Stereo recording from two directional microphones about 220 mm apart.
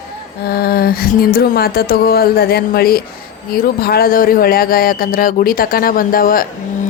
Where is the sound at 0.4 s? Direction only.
45° left (ahead or behind).